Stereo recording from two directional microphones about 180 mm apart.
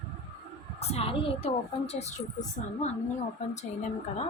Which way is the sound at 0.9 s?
35° left (ahead or behind).